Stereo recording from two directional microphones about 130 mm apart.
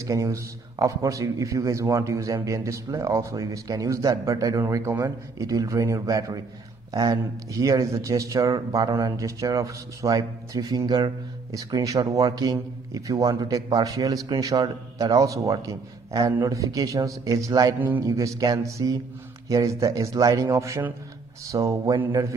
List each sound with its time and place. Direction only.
0.0 s a man's voice: 25° right (ahead or behind)
17.7 s speech: 15° right (ahead or behind)
18.0 s a man's voice: 25° right (ahead or behind)